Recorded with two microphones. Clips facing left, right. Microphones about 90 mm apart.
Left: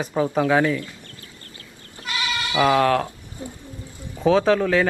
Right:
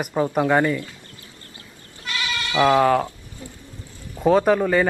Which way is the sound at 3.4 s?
25° left (ahead or behind).